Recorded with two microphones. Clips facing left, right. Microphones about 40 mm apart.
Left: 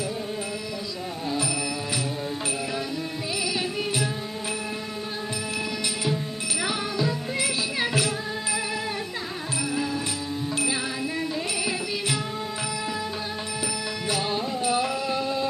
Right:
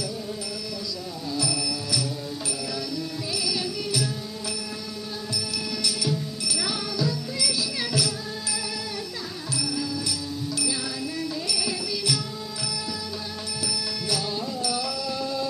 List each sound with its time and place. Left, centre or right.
1.3 s music: left
3.3 s carnatic music: left
5.3 s music: left
9.6 s music: left
11.2 s music: left
13.7 s music: left